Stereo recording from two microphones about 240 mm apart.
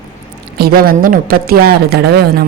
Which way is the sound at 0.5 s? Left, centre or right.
Right.